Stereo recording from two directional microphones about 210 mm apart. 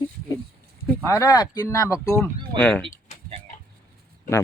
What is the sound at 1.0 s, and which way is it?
Speech, 15° left (ahead or behind).